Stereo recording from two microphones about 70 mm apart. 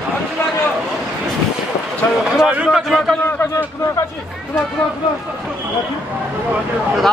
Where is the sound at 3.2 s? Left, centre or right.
Left.